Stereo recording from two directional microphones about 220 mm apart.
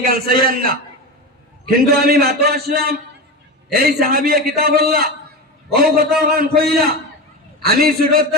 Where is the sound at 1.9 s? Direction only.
45° right (ahead or behind).